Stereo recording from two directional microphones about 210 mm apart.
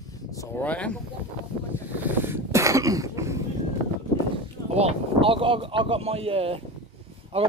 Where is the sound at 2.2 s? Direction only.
10° right (ahead or behind).